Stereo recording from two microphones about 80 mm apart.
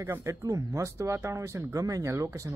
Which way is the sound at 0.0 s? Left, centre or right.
Right.